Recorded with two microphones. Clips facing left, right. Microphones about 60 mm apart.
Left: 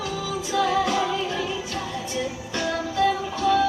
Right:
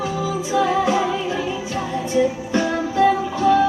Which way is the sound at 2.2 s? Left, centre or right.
Right.